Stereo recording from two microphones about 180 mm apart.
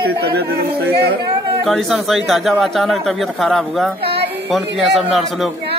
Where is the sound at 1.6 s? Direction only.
Centre (ahead or behind).